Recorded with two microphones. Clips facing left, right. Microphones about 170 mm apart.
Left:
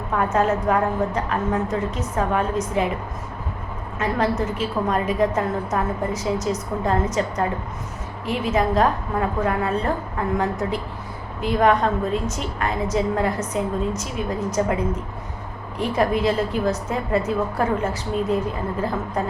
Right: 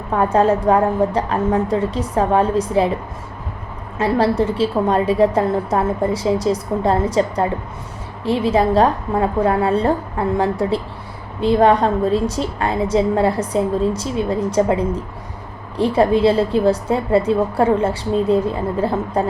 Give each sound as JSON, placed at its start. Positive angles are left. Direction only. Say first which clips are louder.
{"t": 0.1, "sound": "a woman's voice", "louder": "right 5 dB", "side_deg": -35}
{"t": 3.9, "sound": "a woman's voice", "louder": "right 6 dB", "side_deg": -30}